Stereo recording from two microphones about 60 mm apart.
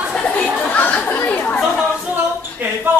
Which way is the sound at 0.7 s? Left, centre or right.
Left.